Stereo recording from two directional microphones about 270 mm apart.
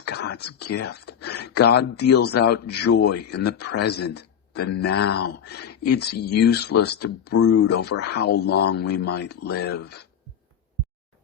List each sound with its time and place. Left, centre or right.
0.1 s whispering: left
2.0 s speech: left